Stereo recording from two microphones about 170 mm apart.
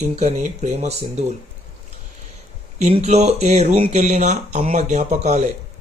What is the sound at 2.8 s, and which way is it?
Speech, 40° right (ahead or behind).